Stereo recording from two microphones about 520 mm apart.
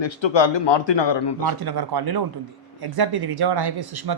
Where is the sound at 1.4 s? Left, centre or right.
Right.